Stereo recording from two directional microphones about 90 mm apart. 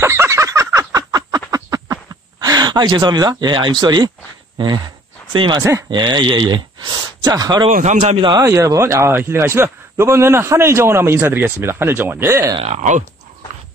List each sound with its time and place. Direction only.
0.0 s fowl: 30° right (ahead or behind)
1.5 s a sound: 45° right (ahead or behind)
2.4 s speech: 50° right (ahead or behind)
5.3 s speech: 70° right (ahead or behind)
5.6 s speech: 30° right (ahead or behind)
5.9 s speech: 60° right (ahead or behind)
8.4 s a man's voice: 35° right (ahead or behind)